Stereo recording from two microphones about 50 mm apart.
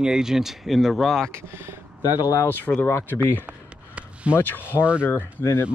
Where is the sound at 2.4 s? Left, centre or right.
Left.